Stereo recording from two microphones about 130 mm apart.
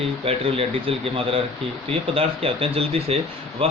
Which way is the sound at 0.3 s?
45° right (ahead or behind).